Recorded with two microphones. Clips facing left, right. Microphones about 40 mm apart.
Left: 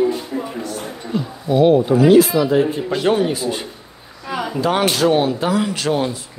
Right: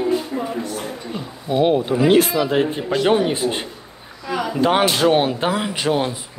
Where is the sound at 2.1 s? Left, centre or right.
Right.